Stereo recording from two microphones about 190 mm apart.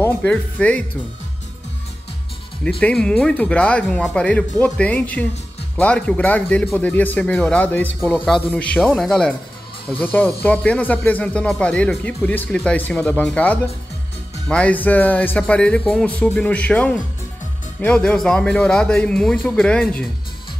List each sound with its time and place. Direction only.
0.0 s speech: 10° left (ahead or behind)
2.8 s speech: 5° left (ahead or behind)